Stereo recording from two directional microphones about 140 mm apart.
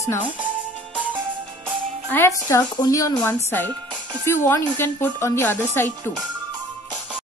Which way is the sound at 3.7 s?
35° right (ahead or behind).